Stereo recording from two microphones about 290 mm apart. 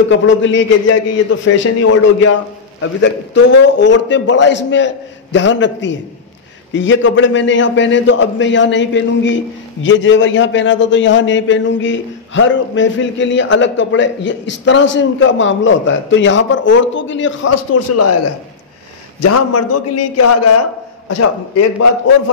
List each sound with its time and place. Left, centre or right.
0.1 s a man's voice: left
2.8 s a man's voice: left
17.5 s a man's voice: left
19.2 s a man's voice: left